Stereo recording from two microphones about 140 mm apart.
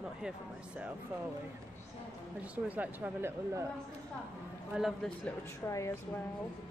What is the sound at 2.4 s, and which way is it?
Speech, 10° right (ahead or behind).